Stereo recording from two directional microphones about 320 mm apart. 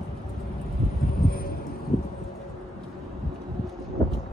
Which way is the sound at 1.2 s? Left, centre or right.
Left.